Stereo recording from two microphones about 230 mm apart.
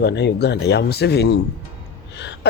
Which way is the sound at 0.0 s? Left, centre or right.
Left.